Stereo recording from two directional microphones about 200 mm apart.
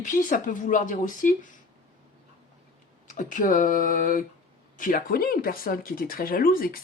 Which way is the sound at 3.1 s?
40° left (ahead or behind).